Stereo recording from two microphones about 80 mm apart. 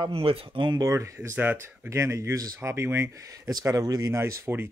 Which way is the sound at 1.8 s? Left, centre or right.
Right.